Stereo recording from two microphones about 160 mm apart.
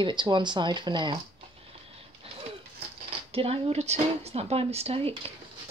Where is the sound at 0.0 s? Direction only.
30° right (ahead or behind).